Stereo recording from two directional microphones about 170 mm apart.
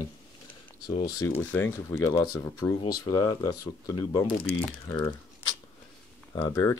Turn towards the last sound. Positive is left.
turn(degrees=15)  # may be behind; listen again after turning